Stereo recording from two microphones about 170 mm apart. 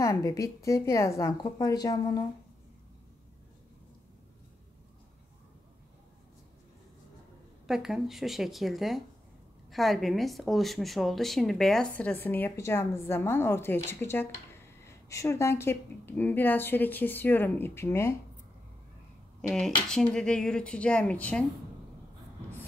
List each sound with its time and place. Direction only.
0.0 s a woman's voice: 20° left (ahead or behind)
7.6 s a woman's voice: centre (ahead or behind); by 18.1 s 15° left (ahead or behind)
19.5 s a woman's voice: 5° left (ahead or behind)